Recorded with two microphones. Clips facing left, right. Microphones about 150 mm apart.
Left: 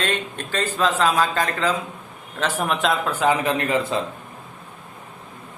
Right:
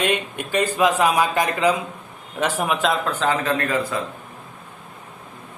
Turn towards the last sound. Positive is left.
turn(degrees=25)  # may be behind; listen again after turning